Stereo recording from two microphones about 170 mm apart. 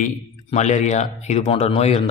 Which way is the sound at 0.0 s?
45° left (ahead or behind).